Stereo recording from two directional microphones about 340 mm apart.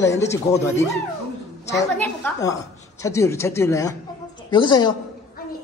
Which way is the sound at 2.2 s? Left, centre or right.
Centre.